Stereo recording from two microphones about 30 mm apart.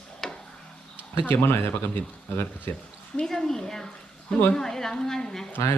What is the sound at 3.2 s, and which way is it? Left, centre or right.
A woman's voice, centre.